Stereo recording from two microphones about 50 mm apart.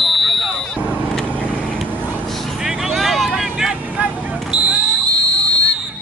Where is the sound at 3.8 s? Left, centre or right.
Right.